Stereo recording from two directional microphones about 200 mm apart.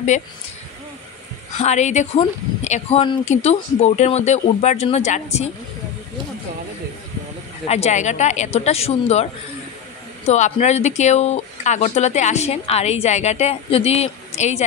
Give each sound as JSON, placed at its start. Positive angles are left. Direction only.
{"t": 1.6, "sound": "speech", "side_deg": 35}
{"t": 7.6, "sound": "speech", "side_deg": 30}